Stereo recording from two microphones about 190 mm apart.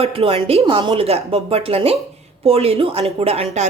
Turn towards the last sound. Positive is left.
turn(degrees=-35)  # may be behind; listen again after turning